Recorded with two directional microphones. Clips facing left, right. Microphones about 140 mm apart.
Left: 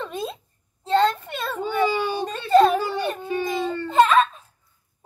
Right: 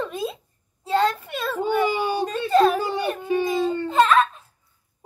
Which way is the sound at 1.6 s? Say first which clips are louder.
Right 1 dB; 15° right (ahead or behind).